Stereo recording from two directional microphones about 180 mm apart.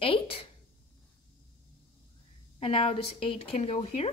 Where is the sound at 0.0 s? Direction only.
30° left (ahead or behind).